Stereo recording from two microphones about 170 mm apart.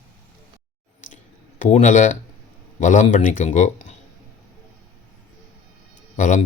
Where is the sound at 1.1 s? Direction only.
45° left (ahead or behind).